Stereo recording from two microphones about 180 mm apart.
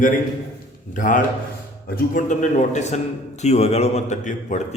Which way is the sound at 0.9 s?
45° left (ahead or behind).